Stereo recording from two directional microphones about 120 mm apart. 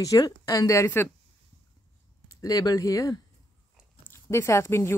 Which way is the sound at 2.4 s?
30° left (ahead or behind).